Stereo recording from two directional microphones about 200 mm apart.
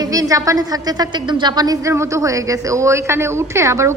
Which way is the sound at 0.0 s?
15° right (ahead or behind).